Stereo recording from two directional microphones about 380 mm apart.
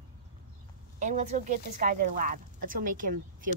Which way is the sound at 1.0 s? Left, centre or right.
Centre.